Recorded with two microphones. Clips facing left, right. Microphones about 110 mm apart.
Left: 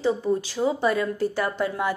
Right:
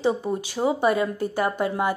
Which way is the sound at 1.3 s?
50° right (ahead or behind).